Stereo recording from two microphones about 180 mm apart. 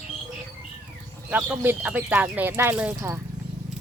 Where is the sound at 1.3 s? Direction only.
10° right (ahead or behind).